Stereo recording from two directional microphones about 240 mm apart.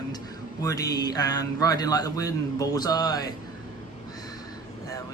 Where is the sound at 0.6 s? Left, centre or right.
Centre.